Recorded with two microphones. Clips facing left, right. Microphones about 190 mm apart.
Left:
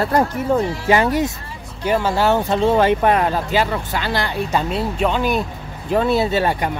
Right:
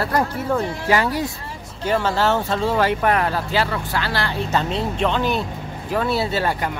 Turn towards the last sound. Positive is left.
turn(degrees=20)  # may be behind; listen again after turning